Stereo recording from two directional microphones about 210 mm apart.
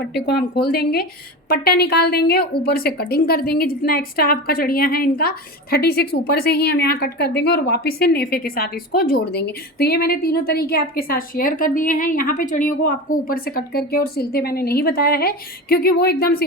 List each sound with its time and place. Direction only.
0.1 s a woman's voice: 50° left (ahead or behind)